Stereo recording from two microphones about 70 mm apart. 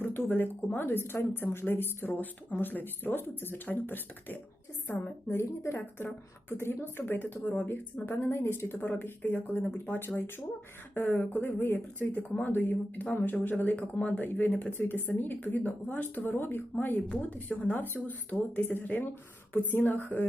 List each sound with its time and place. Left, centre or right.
0.0 s speech: left
8.0 s speech: left